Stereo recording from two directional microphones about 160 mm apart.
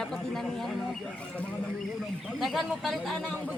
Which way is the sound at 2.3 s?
Centre (ahead or behind).